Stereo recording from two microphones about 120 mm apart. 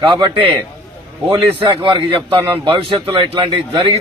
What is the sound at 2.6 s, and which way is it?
Speech, 45° right (ahead or behind).